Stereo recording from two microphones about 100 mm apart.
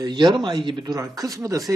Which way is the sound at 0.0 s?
50° right (ahead or behind).